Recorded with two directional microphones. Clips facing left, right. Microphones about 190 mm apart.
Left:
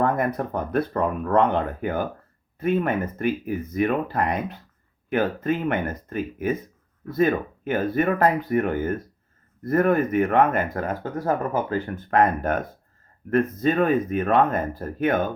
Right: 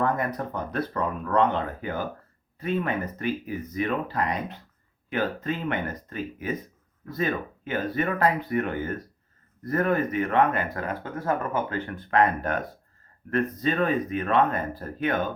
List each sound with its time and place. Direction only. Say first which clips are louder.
0.0 s speech: left 4 dB; 50° left (ahead or behind)